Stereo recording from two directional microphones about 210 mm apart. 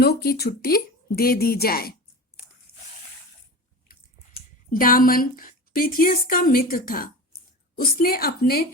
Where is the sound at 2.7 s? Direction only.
80° left.